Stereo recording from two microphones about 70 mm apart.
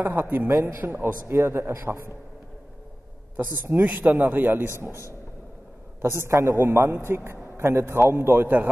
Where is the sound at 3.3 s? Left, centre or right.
Right.